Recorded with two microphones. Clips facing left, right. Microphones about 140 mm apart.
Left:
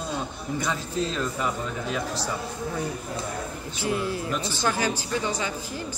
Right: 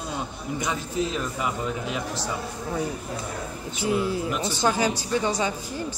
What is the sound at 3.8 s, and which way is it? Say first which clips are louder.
Speech: right 3 dB; 20° right (ahead or behind).